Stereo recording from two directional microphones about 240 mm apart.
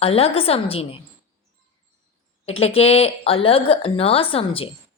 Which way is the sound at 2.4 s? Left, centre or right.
Left.